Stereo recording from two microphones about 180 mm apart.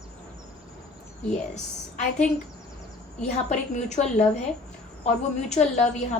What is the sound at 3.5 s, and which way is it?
A woman's voice, 40° left (ahead or behind).